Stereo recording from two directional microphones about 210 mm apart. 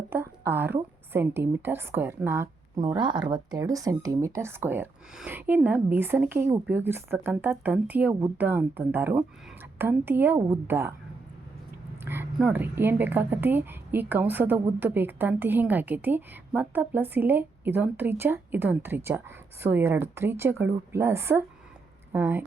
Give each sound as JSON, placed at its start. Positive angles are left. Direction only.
{"t": 0.1, "sound": "a woman's voice", "side_deg": -10}
{"t": 12.0, "sound": "a woman's voice", "side_deg": -10}